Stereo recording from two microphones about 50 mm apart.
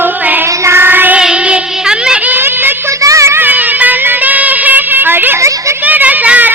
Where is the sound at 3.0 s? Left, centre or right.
Right.